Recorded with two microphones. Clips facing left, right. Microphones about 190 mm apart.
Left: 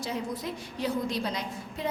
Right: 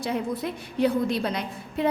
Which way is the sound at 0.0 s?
60° right (ahead or behind).